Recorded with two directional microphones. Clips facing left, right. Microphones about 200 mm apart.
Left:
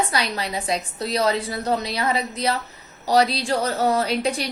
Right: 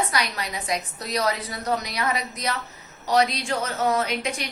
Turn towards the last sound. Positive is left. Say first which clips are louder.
# left 4 dB
turn(degrees=35)  # may be behind; listen again after turning